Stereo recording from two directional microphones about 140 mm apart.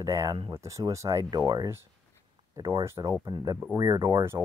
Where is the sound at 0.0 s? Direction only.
25° right (ahead or behind).